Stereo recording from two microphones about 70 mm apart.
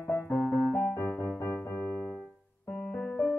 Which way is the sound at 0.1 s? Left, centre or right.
Left.